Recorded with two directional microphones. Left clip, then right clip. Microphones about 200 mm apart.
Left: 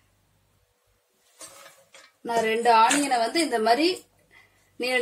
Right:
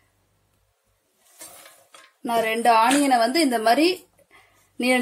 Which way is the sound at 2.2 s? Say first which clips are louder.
Right 2 dB; 50° right (ahead or behind).